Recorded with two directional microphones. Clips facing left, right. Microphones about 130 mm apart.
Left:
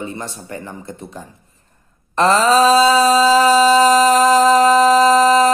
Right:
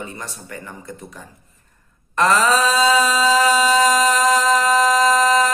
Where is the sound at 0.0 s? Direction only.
25° left (ahead or behind).